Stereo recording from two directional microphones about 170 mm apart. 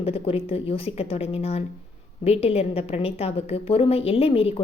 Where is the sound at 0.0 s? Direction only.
35° left (ahead or behind).